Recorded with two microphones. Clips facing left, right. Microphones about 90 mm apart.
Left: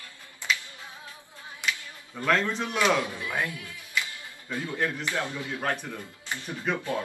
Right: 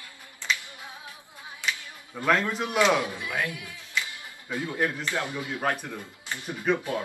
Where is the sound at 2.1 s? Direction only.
10° right (ahead or behind).